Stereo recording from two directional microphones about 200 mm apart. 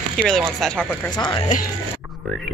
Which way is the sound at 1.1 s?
25° left (ahead or behind).